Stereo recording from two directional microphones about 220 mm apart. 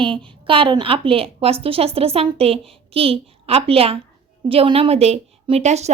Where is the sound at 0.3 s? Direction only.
25° right (ahead or behind).